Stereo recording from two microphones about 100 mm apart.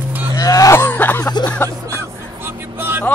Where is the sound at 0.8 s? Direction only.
20° left (ahead or behind).